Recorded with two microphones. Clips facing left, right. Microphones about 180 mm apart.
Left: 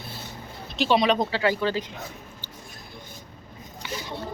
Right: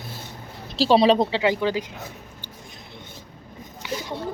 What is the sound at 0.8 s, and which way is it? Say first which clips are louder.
Speech: right 5 dB; 30° right (ahead or behind).